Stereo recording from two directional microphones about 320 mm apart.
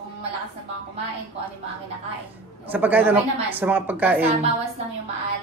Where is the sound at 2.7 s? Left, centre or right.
Centre.